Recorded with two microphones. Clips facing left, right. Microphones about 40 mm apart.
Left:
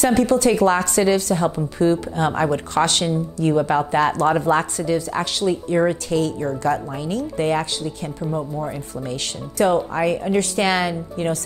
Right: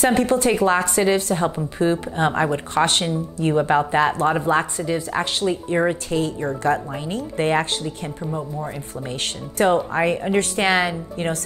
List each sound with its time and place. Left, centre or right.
0.0 s speech: right
0.5 s speech: centre
6.6 s speech: right
9.1 s speech: right
11.2 s speech: right